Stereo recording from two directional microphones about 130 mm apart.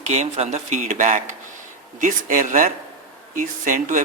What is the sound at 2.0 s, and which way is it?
Speech, 85° right.